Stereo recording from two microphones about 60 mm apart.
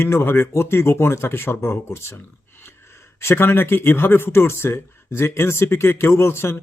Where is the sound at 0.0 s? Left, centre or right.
Left.